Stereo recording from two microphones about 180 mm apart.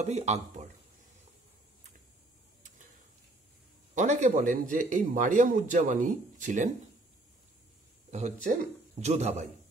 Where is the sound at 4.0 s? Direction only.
45° right (ahead or behind).